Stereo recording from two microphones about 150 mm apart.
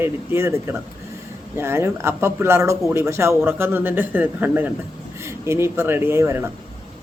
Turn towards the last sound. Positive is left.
turn(degrees=-15)  # may be behind; listen again after turning